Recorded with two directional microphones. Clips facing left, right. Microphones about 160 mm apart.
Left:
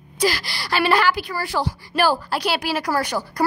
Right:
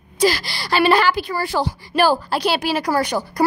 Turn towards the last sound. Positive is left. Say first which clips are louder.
# right 3 dB
turn(degrees=-20)  # may be behind; listen again after turning